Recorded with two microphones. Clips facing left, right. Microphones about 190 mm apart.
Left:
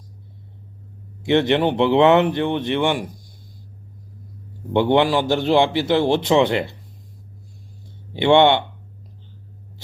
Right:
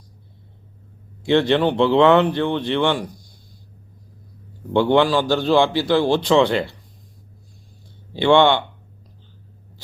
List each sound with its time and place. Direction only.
1.2 s a man's voice: 20° left (ahead or behind)
4.7 s a man's voice: 20° left (ahead or behind)
8.1 s a man's voice: 20° left (ahead or behind)